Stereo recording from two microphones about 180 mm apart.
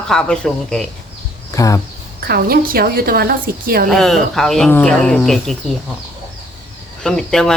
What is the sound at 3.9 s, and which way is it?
Speech, centre (ahead or behind).